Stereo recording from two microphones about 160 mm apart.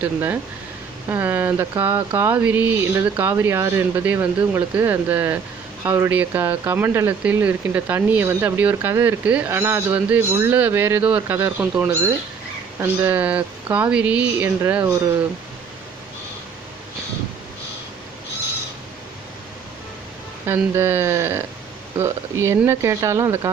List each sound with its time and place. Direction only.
0.0 s speech: 15° right (ahead or behind)
20.5 s speech: 15° right (ahead or behind)